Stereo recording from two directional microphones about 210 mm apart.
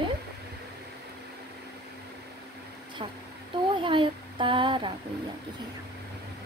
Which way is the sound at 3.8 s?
25° right (ahead or behind).